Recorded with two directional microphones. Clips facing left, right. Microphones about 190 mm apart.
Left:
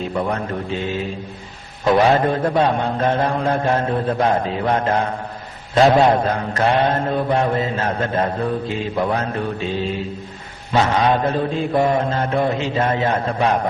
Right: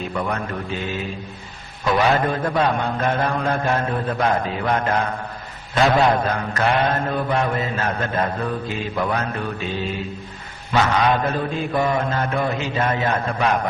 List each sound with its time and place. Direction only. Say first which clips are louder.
0.1 s mantra: left 3 dB; 30° left (ahead or behind)